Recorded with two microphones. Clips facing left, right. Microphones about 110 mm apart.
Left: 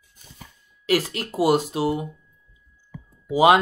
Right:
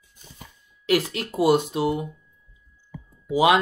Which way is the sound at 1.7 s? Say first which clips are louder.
Even; 5° left (ahead or behind).